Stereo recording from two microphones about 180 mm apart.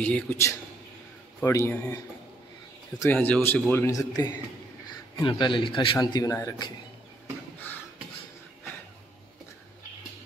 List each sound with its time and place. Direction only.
0.0 s a man's voice: 10° left (ahead or behind)
3.0 s a man's voice: 10° left (ahead or behind)